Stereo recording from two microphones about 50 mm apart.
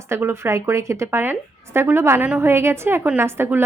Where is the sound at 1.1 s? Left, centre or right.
Right.